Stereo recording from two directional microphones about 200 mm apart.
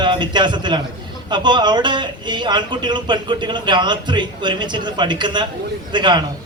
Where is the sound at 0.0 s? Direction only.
20° right (ahead or behind).